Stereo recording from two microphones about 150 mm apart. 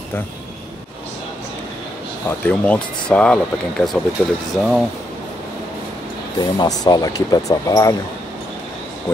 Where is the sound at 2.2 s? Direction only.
10° left (ahead or behind).